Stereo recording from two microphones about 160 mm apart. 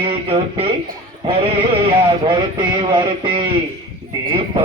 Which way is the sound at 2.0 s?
30° right (ahead or behind).